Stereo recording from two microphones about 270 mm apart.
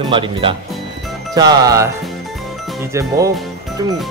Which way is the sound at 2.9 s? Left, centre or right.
Centre.